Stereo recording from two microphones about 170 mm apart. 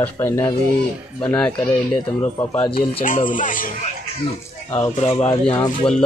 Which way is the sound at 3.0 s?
50° left (ahead or behind).